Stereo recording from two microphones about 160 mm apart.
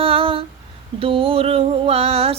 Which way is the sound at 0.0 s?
35° right (ahead or behind).